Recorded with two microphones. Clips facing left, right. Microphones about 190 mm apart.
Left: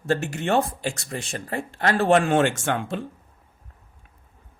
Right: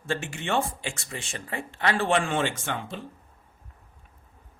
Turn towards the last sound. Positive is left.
turn(degrees=50)  # may be behind; listen again after turning